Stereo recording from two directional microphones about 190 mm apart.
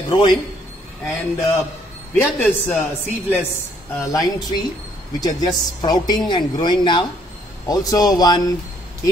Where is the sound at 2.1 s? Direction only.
10° left (ahead or behind).